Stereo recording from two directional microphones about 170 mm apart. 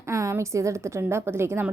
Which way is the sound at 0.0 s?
15° right (ahead or behind).